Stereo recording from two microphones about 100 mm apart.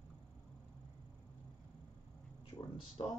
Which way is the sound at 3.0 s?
55° left (ahead or behind).